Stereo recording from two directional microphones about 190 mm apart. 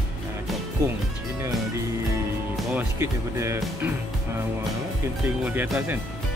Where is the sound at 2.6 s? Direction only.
10° right (ahead or behind).